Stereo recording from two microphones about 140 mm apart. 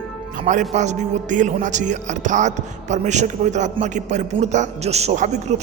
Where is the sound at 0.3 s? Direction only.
60° right (ahead or behind).